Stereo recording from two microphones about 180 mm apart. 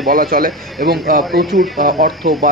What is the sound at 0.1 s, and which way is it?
Speech, 50° right (ahead or behind).